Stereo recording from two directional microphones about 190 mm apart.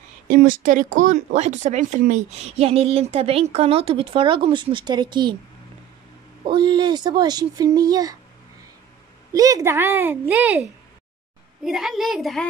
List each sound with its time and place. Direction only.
0.3 s speech: 45° right (ahead or behind); by 5.4 s 25° right (ahead or behind)
6.4 s speech: 25° right (ahead or behind)
9.3 s a woman's voice: 20° right (ahead or behind); by 12.4 s centre (ahead or behind)